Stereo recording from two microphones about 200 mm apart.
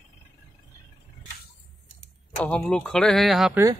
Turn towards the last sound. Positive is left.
turn(degrees=0)  # may be behind; listen again after turning